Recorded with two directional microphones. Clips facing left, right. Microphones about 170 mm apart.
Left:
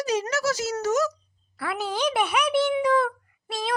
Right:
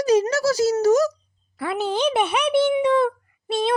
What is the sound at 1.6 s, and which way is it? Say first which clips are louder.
Speech: right 5 dB; 25° right (ahead or behind).